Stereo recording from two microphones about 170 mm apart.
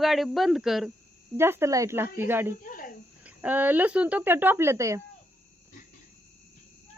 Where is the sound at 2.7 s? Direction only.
55° left (ahead or behind).